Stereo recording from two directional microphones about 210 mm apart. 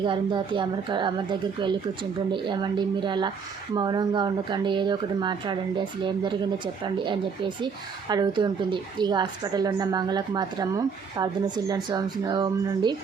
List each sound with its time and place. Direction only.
0.0 s a woman's voice: 20° right (ahead or behind)